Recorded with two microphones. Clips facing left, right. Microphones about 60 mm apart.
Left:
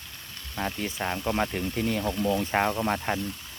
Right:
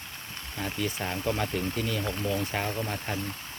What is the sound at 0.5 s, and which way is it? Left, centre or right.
Speech, left.